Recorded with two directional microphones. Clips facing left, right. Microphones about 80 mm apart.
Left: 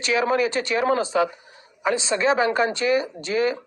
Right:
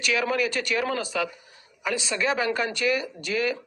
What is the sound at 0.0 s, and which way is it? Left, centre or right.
Speech, left.